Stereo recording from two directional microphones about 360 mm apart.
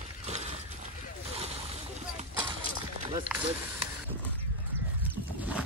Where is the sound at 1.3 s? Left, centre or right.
Centre.